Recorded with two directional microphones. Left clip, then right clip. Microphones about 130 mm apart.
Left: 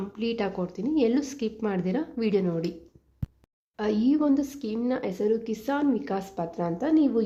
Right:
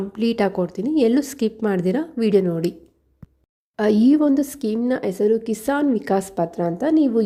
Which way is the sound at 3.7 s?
55° right (ahead or behind).